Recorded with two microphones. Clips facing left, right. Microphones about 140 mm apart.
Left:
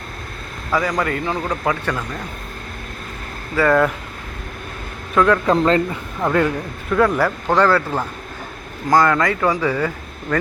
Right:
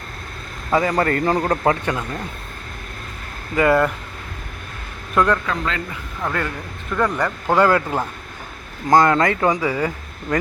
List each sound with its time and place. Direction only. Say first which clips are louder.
0.7 s speech: right 2 dB; 25° right (ahead or behind)
1.0 s a man's voice: right 4 dB; 40° right (ahead or behind)
1.8 s speech: even; 15° right (ahead or behind)
3.5 s speech: even; 15° right (ahead or behind)
5.1 s speech: left 3 dB; centre (ahead or behind)
5.5 s a man's voice: left 9 dB; 35° left (ahead or behind)
6.2 s speech: left 7 dB; 20° left (ahead or behind)
6.9 s speech: left 4 dB; centre (ahead or behind)
7.4 s speech: right 2 dB; 10° right (ahead or behind)